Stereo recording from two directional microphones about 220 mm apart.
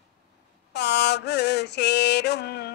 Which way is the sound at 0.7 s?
50° left (ahead or behind).